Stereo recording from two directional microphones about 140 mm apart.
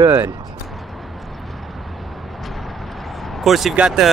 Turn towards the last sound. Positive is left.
turn(degrees=-5)  # may be behind; listen again after turning